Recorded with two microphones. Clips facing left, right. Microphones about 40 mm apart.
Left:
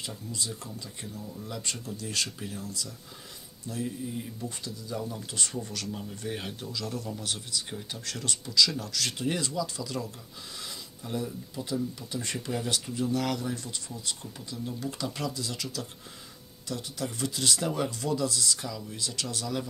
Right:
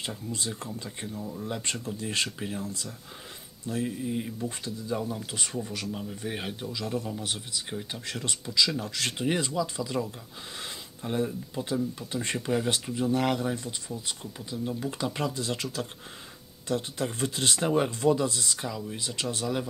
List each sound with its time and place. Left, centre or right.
0.0 s speech: right
10.6 s speech: right